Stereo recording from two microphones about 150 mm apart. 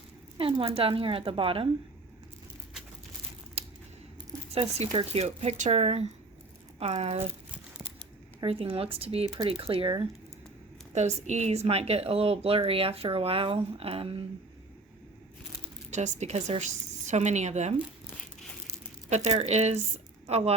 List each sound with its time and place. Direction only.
0.3 s a woman's voice: 35° right (ahead or behind)
3.6 s scissors: 45° right (ahead or behind)
4.5 s speech: 40° right (ahead or behind)
8.4 s a woman's voice: 40° right (ahead or behind)
10.9 s a woman's voice: 50° right (ahead or behind)
15.9 s a woman's voice: 50° right (ahead or behind)
19.1 s speech: 45° right (ahead or behind)